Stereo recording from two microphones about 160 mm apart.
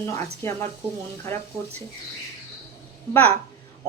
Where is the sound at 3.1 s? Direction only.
10° left (ahead or behind).